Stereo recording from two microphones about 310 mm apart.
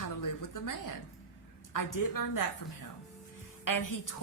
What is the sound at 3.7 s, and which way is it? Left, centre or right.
Speech, left.